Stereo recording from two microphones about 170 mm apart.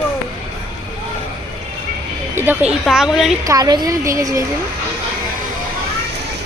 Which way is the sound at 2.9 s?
Centre (ahead or behind).